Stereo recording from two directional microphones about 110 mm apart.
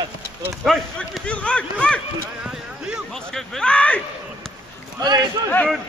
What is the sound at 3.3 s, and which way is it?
Speech, 5° left (ahead or behind).